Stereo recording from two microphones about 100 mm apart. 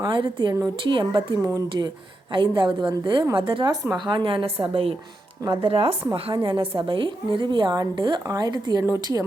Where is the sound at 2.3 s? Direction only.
55° right (ahead or behind); by 6.0 s 70° right (ahead or behind).